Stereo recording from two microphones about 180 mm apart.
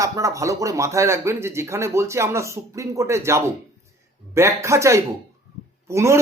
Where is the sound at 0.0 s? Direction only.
15° right (ahead or behind).